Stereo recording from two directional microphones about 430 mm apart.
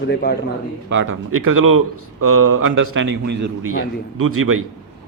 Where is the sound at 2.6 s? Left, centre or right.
Right.